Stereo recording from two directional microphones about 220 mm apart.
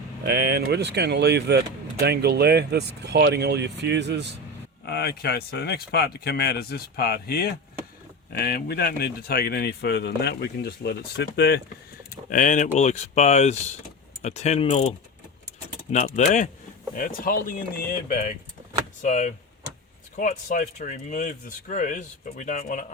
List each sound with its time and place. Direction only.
0.3 s speech: 50° right (ahead or behind)
4.9 s speech: 45° left (ahead or behind)
12.3 s speech: 35° left (ahead or behind)
19.0 s speech: 35° left (ahead or behind)